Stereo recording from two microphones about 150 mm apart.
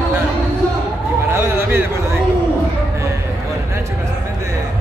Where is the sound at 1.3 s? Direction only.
15° right (ahead or behind).